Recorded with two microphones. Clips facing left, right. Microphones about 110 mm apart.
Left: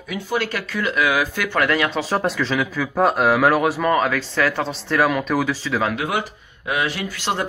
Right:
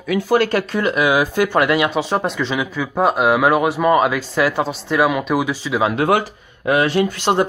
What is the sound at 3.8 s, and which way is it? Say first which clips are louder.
Speech: right 4 dB; 15° right (ahead or behind).